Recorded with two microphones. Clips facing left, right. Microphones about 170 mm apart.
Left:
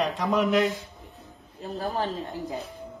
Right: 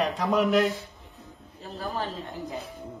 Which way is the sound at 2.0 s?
20° left (ahead or behind).